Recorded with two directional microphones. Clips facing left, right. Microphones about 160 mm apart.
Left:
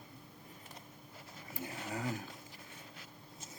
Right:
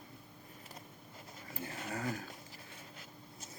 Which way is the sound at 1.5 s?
15° left (ahead or behind).